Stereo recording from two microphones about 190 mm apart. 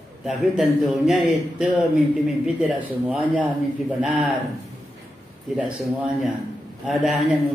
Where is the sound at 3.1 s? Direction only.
5° right (ahead or behind).